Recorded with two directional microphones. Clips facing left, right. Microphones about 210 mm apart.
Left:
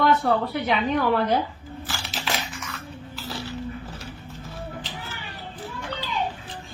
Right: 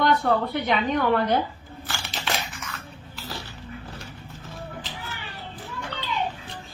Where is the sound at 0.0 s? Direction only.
5° left (ahead or behind).